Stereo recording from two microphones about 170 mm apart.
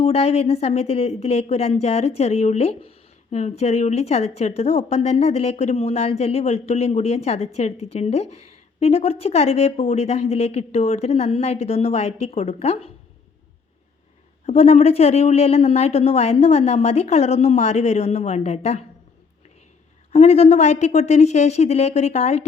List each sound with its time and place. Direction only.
0.0 s a woman's voice: 40° left (ahead or behind)
14.4 s a woman's voice: 40° left (ahead or behind)
20.1 s a woman's voice: 40° left (ahead or behind)